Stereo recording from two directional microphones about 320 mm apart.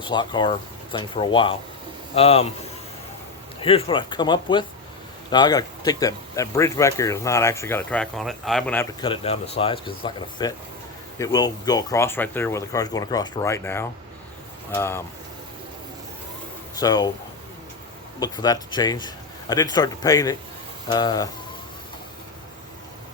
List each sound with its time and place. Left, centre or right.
0.0 s speech: centre
3.6 s speech: centre
16.8 s speech: centre
18.2 s speech: centre